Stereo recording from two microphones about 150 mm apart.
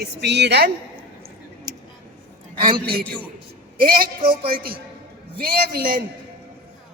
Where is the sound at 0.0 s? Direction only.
90° right.